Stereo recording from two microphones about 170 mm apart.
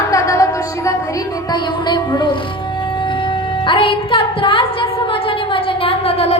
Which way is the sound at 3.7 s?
30° left (ahead or behind).